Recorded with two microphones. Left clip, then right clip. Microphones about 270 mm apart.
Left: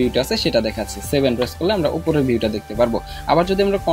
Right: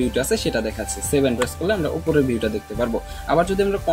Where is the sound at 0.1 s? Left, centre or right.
Left.